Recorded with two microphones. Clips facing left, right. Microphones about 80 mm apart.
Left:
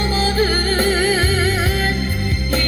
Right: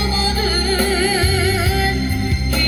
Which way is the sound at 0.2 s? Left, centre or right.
Left.